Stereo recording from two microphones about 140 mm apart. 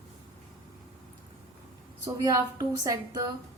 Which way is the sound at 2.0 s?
25° right (ahead or behind).